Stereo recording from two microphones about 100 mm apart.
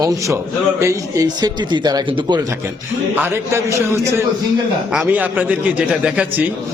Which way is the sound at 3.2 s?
25° right (ahead or behind).